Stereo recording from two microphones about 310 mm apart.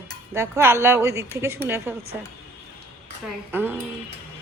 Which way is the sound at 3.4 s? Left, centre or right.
Centre.